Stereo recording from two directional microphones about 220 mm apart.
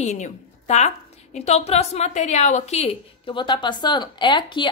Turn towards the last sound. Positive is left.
turn(degrees=20)  # may be behind; listen again after turning